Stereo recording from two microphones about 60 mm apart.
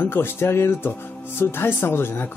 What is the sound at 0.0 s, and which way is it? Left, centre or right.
Speech, left.